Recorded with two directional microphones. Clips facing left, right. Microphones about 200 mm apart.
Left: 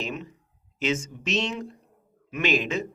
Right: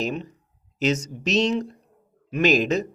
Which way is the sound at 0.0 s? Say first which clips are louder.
Right 6 dB; 35° right (ahead or behind).